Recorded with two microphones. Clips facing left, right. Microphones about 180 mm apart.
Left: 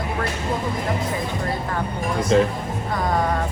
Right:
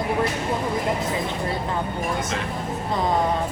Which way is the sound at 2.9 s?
20° right (ahead or behind).